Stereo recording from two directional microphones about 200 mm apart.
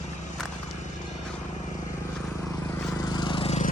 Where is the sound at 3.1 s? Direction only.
25° left (ahead or behind).